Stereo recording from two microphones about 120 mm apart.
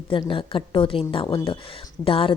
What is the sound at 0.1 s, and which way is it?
A woman's voice, 45° left (ahead or behind).